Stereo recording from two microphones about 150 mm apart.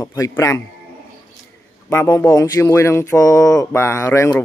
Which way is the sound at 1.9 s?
15° left (ahead or behind).